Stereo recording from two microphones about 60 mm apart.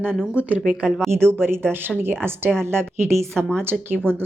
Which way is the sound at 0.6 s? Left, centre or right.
Centre.